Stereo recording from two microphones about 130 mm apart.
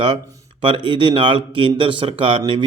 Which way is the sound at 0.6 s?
40° right (ahead or behind).